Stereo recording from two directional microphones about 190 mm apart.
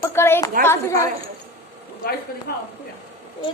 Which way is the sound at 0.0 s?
10° left (ahead or behind).